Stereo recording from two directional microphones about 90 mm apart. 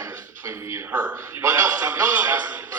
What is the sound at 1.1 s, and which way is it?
A man's voice, 30° right (ahead or behind).